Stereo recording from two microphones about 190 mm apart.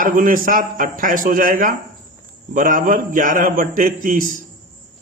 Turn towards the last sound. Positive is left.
turn(degrees=-45)  # may be behind; listen again after turning